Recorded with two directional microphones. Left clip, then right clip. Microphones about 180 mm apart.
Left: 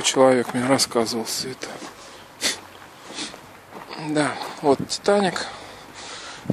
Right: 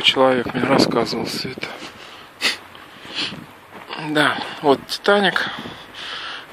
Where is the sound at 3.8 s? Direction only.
5° left (ahead or behind).